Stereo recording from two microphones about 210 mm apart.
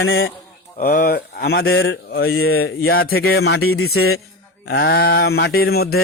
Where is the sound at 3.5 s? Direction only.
85° left.